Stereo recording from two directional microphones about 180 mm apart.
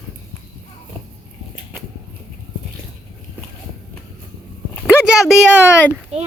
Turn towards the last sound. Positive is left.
turn(degrees=-35)  # may be behind; listen again after turning